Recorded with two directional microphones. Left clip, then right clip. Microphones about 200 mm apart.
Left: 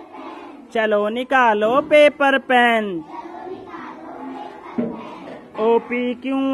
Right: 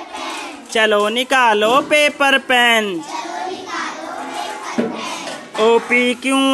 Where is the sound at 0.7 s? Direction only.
10° right (ahead or behind).